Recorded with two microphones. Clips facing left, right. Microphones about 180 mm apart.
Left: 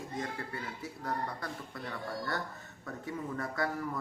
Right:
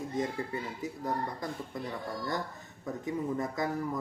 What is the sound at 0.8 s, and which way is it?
Speech, 20° right (ahead or behind).